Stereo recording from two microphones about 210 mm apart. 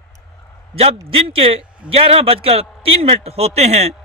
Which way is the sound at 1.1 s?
25° right (ahead or behind).